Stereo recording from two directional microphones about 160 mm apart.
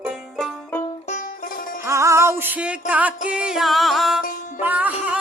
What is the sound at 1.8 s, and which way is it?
Music, 20° right (ahead or behind).